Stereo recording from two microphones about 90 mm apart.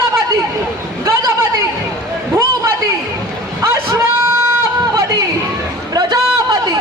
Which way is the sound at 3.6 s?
35° right (ahead or behind).